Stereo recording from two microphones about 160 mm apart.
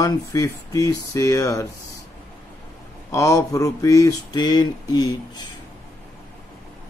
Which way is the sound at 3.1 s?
20° left (ahead or behind).